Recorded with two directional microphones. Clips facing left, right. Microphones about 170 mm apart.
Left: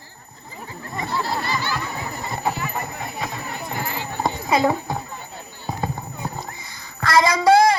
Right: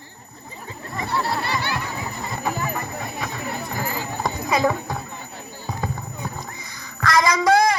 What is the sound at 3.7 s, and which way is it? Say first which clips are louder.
Clip-clop: left 1 dB; 40° right (ahead or behind).